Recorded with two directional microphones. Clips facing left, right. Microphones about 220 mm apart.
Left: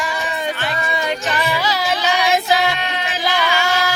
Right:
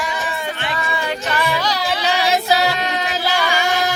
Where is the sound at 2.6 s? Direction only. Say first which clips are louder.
Right 1 dB; 40° right (ahead or behind).